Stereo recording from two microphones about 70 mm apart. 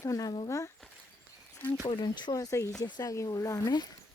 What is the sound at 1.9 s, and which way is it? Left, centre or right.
Speech, left.